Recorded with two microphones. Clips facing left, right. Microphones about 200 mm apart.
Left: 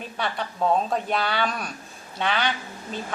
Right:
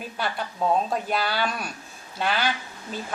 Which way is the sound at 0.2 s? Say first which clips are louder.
Left 1 dB; 5° right (ahead or behind).